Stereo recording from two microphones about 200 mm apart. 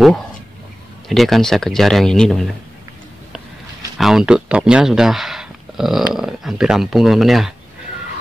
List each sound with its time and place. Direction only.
1.0 s speech: centre (ahead or behind)
4.0 s speech: 5° right (ahead or behind)